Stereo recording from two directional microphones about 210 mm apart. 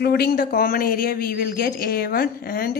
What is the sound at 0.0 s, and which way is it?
Speech, 50° left (ahead or behind).